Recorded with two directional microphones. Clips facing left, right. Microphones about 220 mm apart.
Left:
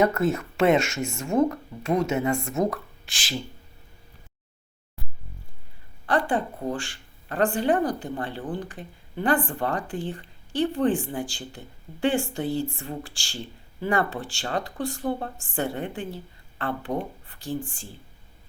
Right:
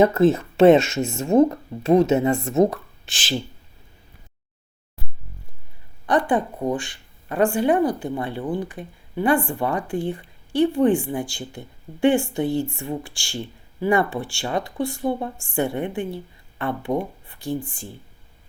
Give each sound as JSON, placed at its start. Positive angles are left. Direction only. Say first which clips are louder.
{"t": 0.0, "sound": "speech", "louder": "right 6 dB", "side_deg": -30}
{"t": 6.1, "sound": "speech", "louder": "right 4 dB", "side_deg": -15}